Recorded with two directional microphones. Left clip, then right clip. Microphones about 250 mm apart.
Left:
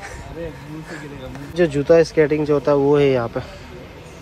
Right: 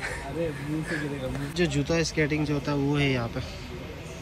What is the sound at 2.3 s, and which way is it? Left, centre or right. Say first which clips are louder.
Speech: left 12 dB; centre.